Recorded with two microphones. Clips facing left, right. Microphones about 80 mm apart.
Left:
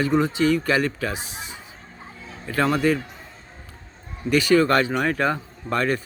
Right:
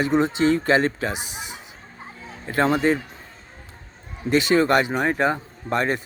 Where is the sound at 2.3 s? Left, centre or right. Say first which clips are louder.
Right 1 dB; right.